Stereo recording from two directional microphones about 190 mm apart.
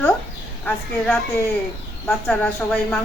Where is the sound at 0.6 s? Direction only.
5° left (ahead or behind).